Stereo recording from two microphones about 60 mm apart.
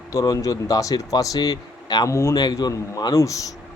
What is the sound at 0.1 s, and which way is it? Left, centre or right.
A man's voice, left.